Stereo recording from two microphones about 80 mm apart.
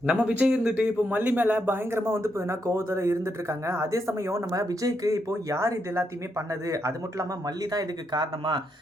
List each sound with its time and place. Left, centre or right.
0.0 s speech: centre; by 8.6 s right